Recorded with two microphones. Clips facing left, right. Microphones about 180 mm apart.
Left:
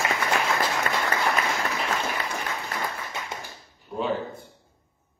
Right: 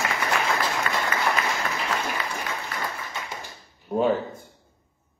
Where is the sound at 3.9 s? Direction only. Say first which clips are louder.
Right 6 dB; 50° right (ahead or behind).